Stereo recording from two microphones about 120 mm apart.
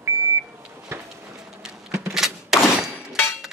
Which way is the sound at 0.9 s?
20° right (ahead or behind).